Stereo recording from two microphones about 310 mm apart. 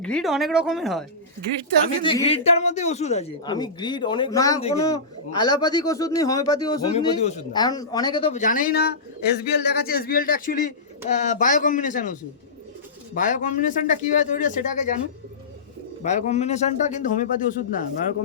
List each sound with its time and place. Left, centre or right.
0.0 s speech: centre
2.0 s a man's voice: centre
13.1 s a man's voice: left
16.0 s a man's voice: left